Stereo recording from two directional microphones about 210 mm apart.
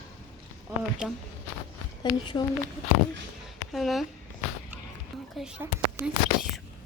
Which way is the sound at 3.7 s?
Centre (ahead or behind).